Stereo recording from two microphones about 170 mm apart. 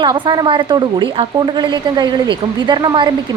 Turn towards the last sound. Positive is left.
turn(degrees=-25)  # may be behind; listen again after turning